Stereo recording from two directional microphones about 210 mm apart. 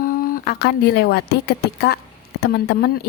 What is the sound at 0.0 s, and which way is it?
Speech, 45° left (ahead or behind).